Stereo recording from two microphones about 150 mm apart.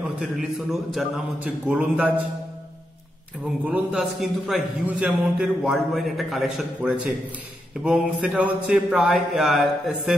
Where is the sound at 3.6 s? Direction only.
10° right (ahead or behind).